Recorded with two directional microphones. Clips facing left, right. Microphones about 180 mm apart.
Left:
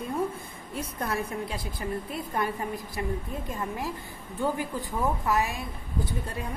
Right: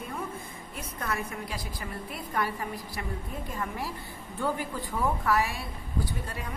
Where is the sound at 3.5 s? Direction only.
20° left (ahead or behind).